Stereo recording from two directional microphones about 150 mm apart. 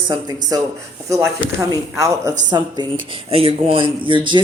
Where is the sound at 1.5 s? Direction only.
20° right (ahead or behind).